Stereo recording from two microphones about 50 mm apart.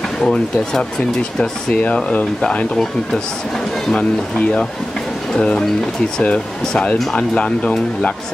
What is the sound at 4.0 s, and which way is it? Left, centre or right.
Speech, left.